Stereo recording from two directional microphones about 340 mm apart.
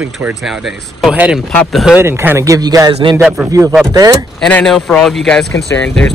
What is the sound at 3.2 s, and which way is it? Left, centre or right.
Speech, centre.